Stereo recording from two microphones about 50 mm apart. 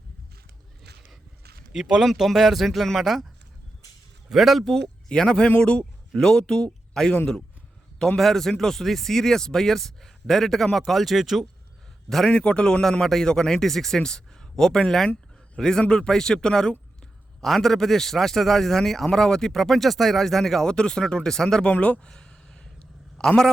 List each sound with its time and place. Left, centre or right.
1.7 s speech: centre
4.3 s speech: centre
5.0 s a man's voice: centre
12.0 s a man's voice: centre